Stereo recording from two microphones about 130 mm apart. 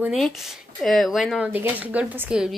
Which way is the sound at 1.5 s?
10° right (ahead or behind).